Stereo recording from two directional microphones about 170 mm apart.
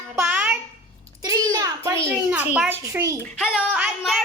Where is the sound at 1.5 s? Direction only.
20° right (ahead or behind).